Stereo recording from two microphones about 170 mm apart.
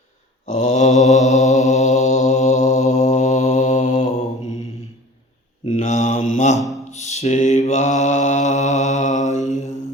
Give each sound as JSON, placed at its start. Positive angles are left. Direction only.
{"t": 0.4, "sound": "mantra", "side_deg": 50}
{"t": 5.6, "sound": "mantra", "side_deg": 45}
{"t": 6.9, "sound": "a sound", "side_deg": 40}
{"t": 7.7, "sound": "mantra", "side_deg": 45}